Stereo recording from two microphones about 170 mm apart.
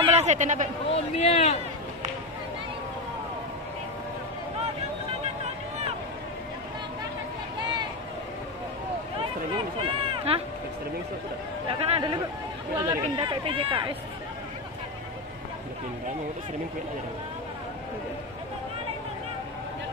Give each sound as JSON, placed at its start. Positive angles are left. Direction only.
{"t": 0.0, "sound": "speech", "side_deg": -40}
{"t": 1.1, "sound": "speech", "side_deg": 40}
{"t": 9.8, "sound": "a sound", "side_deg": -35}
{"t": 11.6, "sound": "speech", "side_deg": -35}
{"t": 12.7, "sound": "speech", "side_deg": -20}
{"t": 13.2, "sound": "speech", "side_deg": -30}